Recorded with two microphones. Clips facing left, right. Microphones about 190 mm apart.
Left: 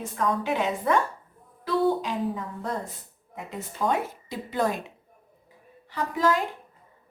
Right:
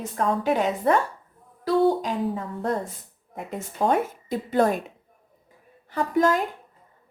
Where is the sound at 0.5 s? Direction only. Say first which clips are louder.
Right 3 dB; 40° right (ahead or behind).